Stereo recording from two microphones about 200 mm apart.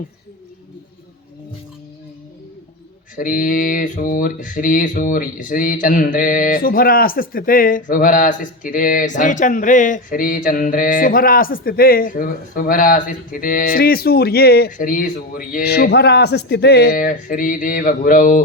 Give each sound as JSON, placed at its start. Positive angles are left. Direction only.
{"t": 3.2, "sound": "speech", "side_deg": 45}